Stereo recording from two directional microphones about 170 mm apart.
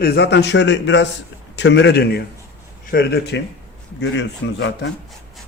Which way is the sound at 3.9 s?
90° left.